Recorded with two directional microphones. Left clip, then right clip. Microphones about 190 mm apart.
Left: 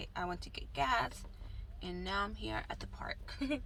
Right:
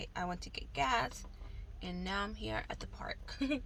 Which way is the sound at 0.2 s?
25° right (ahead or behind).